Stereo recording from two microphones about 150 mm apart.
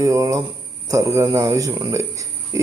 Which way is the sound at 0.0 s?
25° right (ahead or behind).